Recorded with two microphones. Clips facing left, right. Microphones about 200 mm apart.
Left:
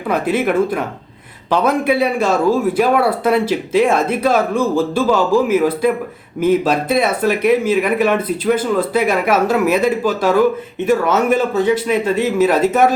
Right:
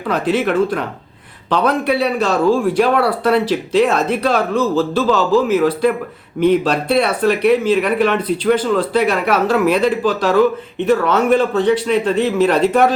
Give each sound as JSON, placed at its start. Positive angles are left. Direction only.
{"t": 0.1, "sound": "speech", "side_deg": 10}